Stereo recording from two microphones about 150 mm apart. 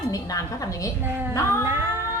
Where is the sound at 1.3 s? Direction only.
20° left (ahead or behind).